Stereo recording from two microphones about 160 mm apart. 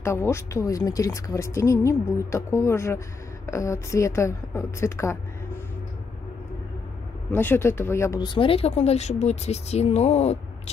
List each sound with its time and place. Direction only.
0.0 s speech: 15° left (ahead or behind)
7.3 s speech: 15° left (ahead or behind); by 10.4 s 45° left (ahead or behind)